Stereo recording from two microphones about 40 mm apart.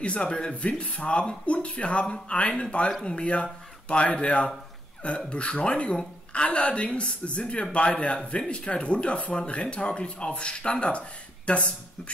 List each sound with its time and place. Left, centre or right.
0.0 s a man's voice: left